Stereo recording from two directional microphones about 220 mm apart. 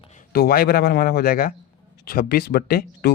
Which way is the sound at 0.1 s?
45° left (ahead or behind).